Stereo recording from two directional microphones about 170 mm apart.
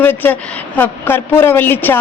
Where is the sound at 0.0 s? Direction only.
10° left (ahead or behind).